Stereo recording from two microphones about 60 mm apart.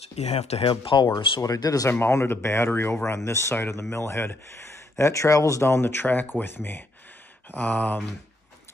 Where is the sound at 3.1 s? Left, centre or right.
Left.